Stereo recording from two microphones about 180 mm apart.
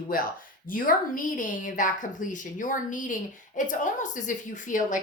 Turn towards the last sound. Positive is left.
turn(degrees=45)  # may be behind; listen again after turning